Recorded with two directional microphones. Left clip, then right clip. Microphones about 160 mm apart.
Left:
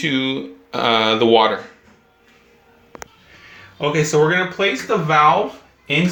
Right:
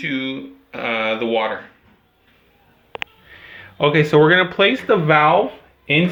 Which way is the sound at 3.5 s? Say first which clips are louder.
Right 3 dB; 50° right (ahead or behind).